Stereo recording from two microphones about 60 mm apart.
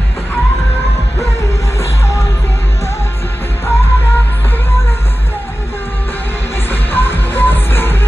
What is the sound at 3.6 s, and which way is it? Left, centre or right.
Music, left.